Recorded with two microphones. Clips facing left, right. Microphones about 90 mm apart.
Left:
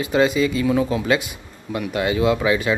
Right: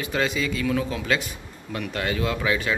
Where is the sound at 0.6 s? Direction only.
20° left (ahead or behind).